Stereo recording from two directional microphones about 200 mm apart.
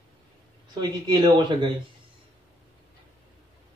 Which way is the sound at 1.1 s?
20° right (ahead or behind).